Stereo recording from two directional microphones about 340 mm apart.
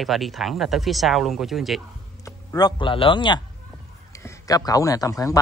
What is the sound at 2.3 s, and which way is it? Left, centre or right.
A man's voice, centre.